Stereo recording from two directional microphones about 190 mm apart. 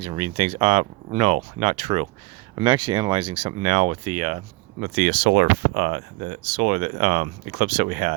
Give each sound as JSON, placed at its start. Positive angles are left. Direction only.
{"t": 0.0, "sound": "speech", "side_deg": -30}
{"t": 2.6, "sound": "speech", "side_deg": -25}
{"t": 4.9, "sound": "speech", "side_deg": -55}